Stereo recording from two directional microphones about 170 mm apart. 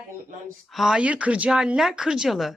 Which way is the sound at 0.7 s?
Centre (ahead or behind).